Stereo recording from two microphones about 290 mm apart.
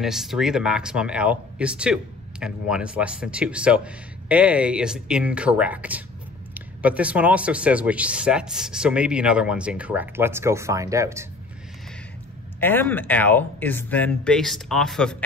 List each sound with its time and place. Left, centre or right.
0.0 s speech: centre
12.5 s speech: centre